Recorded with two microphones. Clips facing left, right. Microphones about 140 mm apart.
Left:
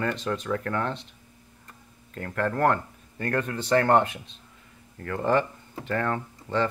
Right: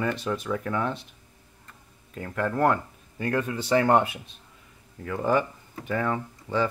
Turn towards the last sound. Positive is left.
turn(degrees=-10)  # may be behind; listen again after turning